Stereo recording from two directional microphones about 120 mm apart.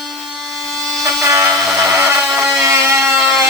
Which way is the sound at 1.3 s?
20° right (ahead or behind).